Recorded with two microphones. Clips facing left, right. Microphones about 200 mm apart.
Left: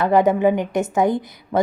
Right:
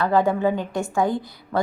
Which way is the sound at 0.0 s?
20° left (ahead or behind).